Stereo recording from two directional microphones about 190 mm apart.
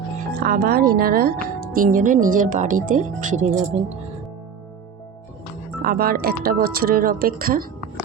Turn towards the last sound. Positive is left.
turn(degrees=-50)  # may be behind; listen again after turning